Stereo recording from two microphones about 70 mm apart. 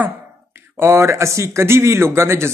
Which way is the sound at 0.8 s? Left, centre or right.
Right.